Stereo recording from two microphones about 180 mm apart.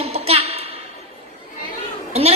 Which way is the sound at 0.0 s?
35° right (ahead or behind).